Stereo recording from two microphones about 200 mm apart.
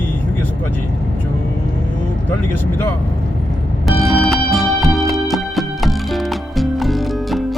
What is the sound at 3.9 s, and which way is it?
Music, centre (ahead or behind).